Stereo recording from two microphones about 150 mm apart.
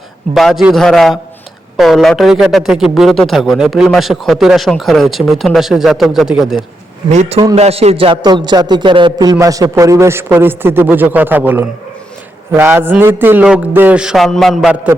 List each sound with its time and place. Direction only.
0.3 s a man's voice: centre (ahead or behind)
7.1 s a man's voice: 45° right (ahead or behind); by 14.8 s centre (ahead or behind)